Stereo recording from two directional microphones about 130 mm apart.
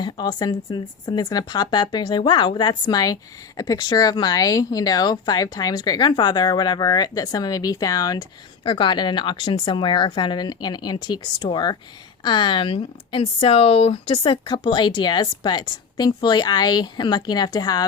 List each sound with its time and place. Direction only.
0.0 s speech: 35° left (ahead or behind)
8.6 s speech: 40° left (ahead or behind)